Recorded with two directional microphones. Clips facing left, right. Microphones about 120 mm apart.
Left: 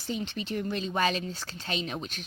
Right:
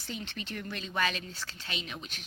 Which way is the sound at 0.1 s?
20° left (ahead or behind).